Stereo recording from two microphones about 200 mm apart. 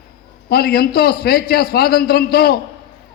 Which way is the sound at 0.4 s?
50° left (ahead or behind).